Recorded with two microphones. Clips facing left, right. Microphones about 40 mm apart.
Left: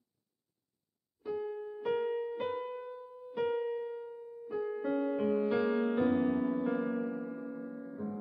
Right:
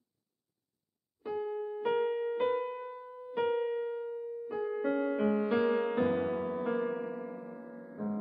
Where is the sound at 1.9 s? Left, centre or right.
Centre.